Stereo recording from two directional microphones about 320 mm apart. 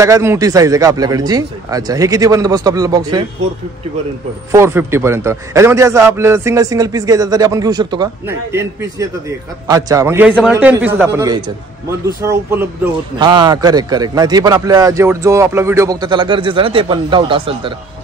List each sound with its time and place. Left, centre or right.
0.0 s speech: centre
4.5 s speech: centre
9.7 s speech: centre